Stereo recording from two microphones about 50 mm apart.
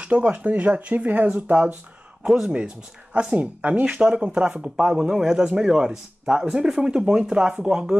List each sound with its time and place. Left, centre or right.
0.0 s speech: right
2.2 s speech: centre
2.5 s speech: right